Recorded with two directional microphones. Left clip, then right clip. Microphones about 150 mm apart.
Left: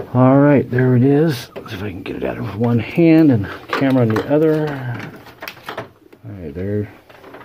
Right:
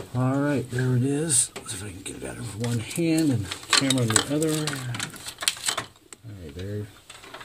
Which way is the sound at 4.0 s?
20° right (ahead or behind).